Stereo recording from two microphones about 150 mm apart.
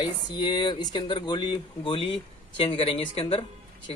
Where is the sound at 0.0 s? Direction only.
30° left (ahead or behind).